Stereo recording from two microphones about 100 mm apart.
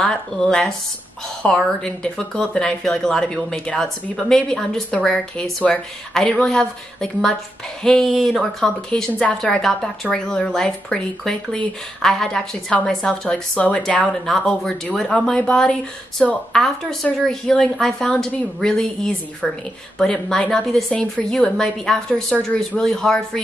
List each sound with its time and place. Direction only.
0.0 s a woman's voice: 5° left (ahead or behind)